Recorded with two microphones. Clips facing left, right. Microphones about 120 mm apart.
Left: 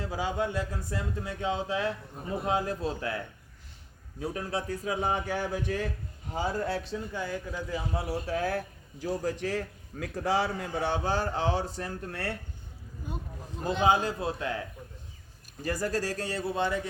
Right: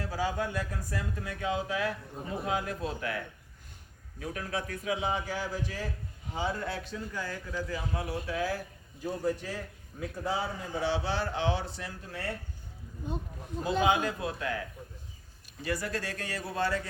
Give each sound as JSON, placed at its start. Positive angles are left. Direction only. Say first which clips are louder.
{"t": 0.0, "sound": "a man's voice", "louder": "left 1 dB", "side_deg": 20}
{"t": 6.3, "sound": "speech", "louder": "left 3 dB", "side_deg": 40}
{"t": 8.4, "sound": "a man's voice", "louder": "left 2 dB", "side_deg": 55}
{"t": 9.0, "sound": "a man's voice", "louder": "left 1 dB", "side_deg": 80}
{"t": 13.0, "sound": "speech", "louder": "right 3 dB", "side_deg": -25}
{"t": 13.8, "sound": "a man's voice", "louder": "left 4 dB", "side_deg": 30}
{"t": 15.6, "sound": "speech", "louder": "left 3 dB", "side_deg": 40}